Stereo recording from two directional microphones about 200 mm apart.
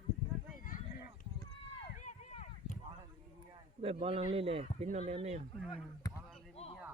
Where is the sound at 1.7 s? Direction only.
30° left (ahead or behind).